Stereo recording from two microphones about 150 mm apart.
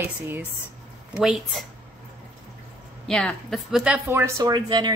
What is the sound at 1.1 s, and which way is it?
Speech, centre (ahead or behind).